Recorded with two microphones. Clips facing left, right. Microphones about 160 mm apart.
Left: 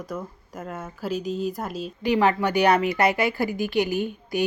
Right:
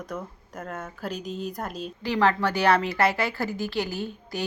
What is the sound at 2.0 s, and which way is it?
A woman's voice, 15° left (ahead or behind).